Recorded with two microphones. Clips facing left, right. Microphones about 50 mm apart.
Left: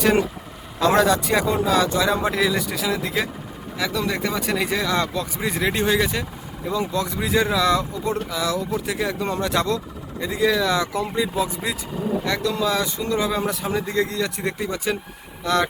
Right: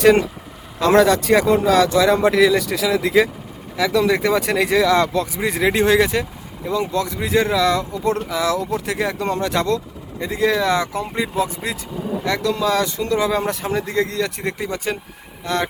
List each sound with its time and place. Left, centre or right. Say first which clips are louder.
0.0 s speech: right 5 dB; right
1.0 s speech: right 4 dB; right
5.0 s speech: right 5 dB; right
10.3 s speech: right 2 dB; right
12.2 s speech: right 6 dB; right
13.8 s speech: right 2 dB; right
14.1 s speech: right 2 dB; right
15.4 s speech: left 1 dB; right